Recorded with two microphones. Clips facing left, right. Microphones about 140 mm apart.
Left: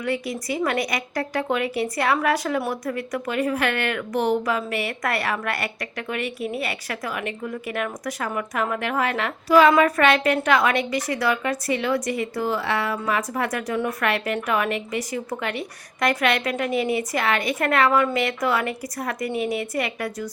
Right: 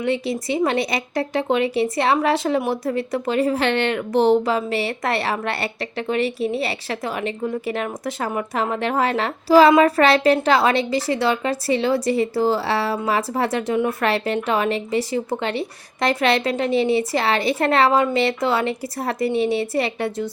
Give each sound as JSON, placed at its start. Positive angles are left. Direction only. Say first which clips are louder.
{"t": 0.0, "sound": "speech", "louder": "right 4 dB", "side_deg": -25}